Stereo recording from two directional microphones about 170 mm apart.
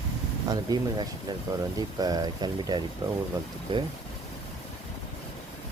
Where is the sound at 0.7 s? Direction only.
20° right (ahead or behind).